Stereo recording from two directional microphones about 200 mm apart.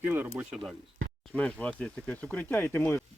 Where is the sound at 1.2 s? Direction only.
5° left (ahead or behind).